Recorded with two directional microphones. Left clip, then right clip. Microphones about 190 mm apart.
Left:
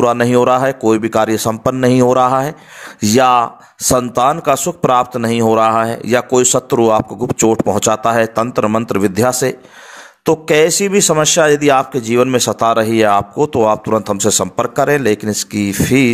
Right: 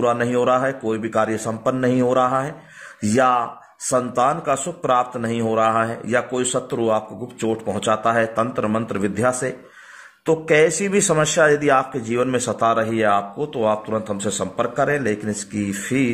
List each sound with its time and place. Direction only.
0.0 s a man's voice: 30° left (ahead or behind)